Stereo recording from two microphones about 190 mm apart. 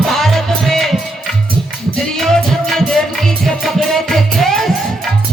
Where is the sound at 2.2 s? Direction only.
Centre (ahead or behind).